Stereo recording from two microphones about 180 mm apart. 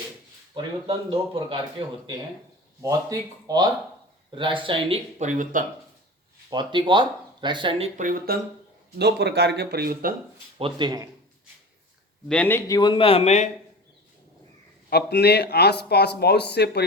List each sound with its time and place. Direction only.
0.5 s speech: 30° right (ahead or behind)
2.8 s speech: 20° right (ahead or behind)
5.2 s speech: 45° right (ahead or behind)
6.5 s speech: 25° right (ahead or behind)
7.9 s speech: 50° right (ahead or behind)
9.0 s speech: 70° right (ahead or behind)
10.6 s speech: 25° right (ahead or behind)
12.3 s a man's voice: 10° left (ahead or behind); by 13.5 s 40° left (ahead or behind)
14.8 s speech: 65° left (ahead or behind)